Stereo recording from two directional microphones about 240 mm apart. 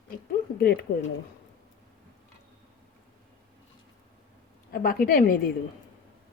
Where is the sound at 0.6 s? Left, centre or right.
Left.